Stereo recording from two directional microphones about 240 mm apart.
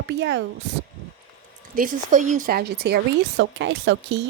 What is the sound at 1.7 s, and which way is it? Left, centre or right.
Speech, right.